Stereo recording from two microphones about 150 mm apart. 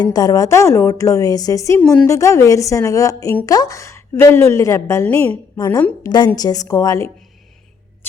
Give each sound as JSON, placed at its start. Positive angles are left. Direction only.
{"t": 0.0, "sound": "a woman's voice", "side_deg": 25}